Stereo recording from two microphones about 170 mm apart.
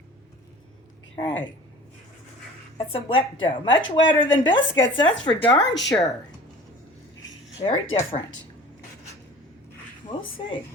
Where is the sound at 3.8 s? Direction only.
90° left.